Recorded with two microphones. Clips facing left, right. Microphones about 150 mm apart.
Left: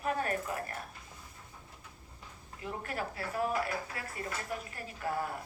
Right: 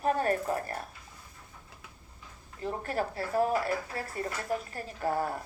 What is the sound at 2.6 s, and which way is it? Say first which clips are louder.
A woman's voice: right 6 dB; 35° right (ahead or behind).